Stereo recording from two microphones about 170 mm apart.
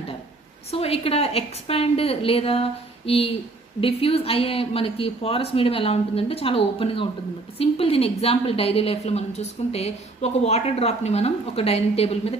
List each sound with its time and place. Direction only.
0.7 s a woman's voice: 35° left (ahead or behind)